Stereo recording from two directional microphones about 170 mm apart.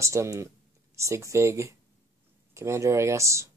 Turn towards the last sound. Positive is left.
turn(degrees=-15)  # may be behind; listen again after turning